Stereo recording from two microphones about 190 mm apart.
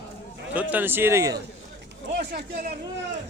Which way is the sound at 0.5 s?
10° right (ahead or behind).